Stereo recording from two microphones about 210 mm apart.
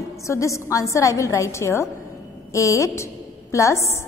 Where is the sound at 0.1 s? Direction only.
15° left (ahead or behind).